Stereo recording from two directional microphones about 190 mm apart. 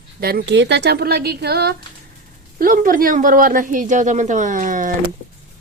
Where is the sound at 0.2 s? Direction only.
55° right (ahead or behind).